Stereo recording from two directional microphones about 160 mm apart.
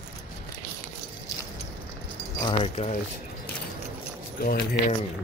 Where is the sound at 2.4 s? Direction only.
40° left (ahead or behind).